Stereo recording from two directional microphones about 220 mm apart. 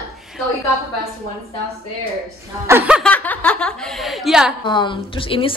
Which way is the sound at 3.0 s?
5° left (ahead or behind).